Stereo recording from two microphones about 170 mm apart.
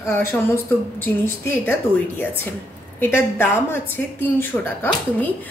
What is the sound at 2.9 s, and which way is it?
A woman's voice, 15° left (ahead or behind).